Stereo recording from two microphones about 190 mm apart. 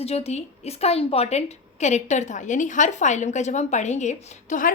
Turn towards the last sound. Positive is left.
turn(degrees=40)  # may be behind; listen again after turning